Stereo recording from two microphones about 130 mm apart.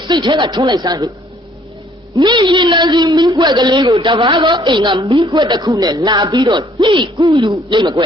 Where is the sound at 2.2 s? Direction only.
35° right (ahead or behind).